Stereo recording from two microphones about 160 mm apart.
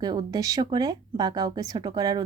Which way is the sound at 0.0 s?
25° right (ahead or behind).